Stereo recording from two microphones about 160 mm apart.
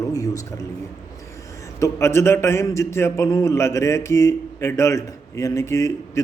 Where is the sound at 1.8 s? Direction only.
15° left (ahead or behind).